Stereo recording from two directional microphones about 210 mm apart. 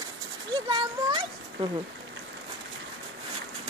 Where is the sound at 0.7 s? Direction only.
20° right (ahead or behind).